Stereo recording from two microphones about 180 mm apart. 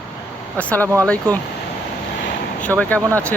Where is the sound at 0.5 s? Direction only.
10° left (ahead or behind).